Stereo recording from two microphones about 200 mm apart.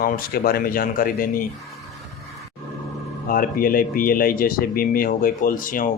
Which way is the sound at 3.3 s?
45° left (ahead or behind).